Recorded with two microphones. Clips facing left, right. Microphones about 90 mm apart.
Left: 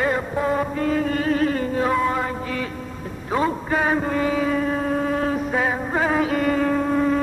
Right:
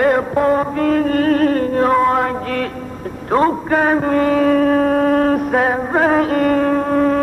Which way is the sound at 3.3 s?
60° right (ahead or behind).